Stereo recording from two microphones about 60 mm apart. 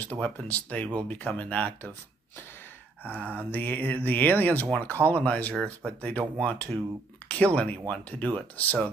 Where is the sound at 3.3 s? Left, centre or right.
Left.